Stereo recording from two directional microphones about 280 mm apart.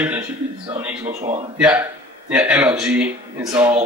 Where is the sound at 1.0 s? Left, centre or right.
Right.